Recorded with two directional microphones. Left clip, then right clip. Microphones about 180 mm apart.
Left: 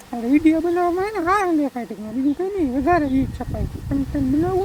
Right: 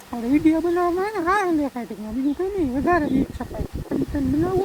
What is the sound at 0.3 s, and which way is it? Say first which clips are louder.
Speech: left 2 dB; 15° left (ahead or behind).